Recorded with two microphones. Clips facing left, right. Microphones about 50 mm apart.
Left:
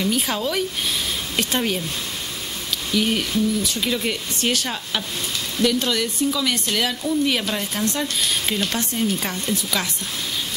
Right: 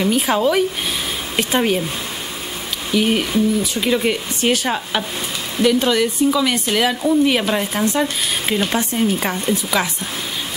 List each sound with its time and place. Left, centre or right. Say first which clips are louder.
0.0 s speech: right 6 dB; centre
2.9 s speech: right 4 dB; centre